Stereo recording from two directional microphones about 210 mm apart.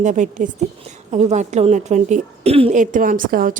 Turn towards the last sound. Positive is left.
turn(degrees=-40)  # may be behind; listen again after turning